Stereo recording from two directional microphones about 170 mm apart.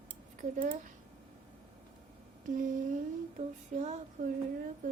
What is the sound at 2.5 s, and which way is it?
Speech, 50° right (ahead or behind).